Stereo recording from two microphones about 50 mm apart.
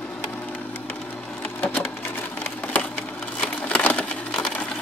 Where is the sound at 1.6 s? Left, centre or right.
Centre.